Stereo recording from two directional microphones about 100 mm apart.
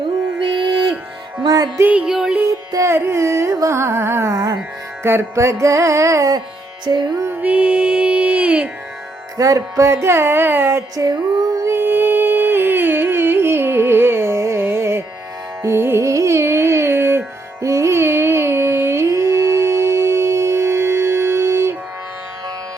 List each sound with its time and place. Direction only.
1.4 s music: 40° right (ahead or behind)
1.8 s music: 15° right (ahead or behind)
2.5 s carnatic music: 30° right (ahead or behind)
5.0 s music: 25° right (ahead or behind)
6.8 s music: 45° right (ahead or behind)
7.4 s music: 15° right (ahead or behind)
9.4 s carnatic music: 35° right (ahead or behind)
11.0 s a sound: 40° right (ahead or behind)
15.6 s music: 25° right (ahead or behind)